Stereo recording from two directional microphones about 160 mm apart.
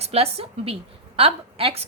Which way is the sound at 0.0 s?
40° right (ahead or behind).